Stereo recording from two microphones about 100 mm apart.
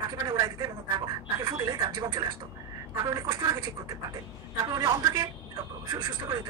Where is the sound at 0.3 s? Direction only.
40° right (ahead or behind).